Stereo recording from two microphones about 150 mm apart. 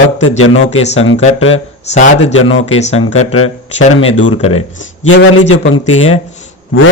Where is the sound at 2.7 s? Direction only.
45° left (ahead or behind).